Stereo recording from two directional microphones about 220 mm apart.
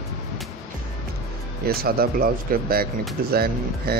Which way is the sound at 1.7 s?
45° right (ahead or behind).